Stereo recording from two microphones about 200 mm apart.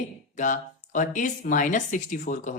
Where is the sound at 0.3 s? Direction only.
40° left (ahead or behind).